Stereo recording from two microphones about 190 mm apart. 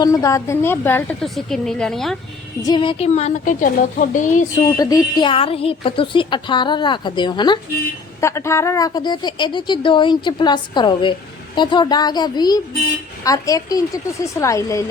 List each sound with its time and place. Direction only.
0.0 s a woman's voice: 15° left (ahead or behind)
2.6 s a woman's voice: 25° left (ahead or behind); by 4.7 s 40° left (ahead or behind)
4.8 s a woman's voice: 20° left (ahead or behind)